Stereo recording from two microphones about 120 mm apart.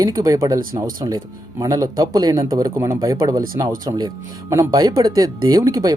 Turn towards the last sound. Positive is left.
turn(degrees=-30)  # may be behind; listen again after turning